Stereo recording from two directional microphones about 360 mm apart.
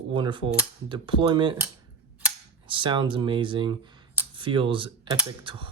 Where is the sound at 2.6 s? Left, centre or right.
Centre.